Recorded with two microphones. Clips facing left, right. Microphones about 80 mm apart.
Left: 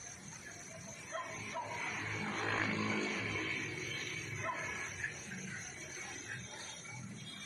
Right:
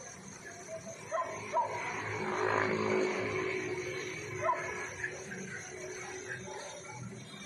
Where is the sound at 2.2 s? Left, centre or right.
Right.